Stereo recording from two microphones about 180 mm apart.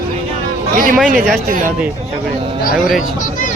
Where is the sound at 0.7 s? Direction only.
50° right (ahead or behind).